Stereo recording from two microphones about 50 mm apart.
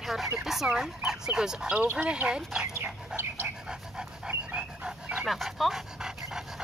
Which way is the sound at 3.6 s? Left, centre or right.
Centre.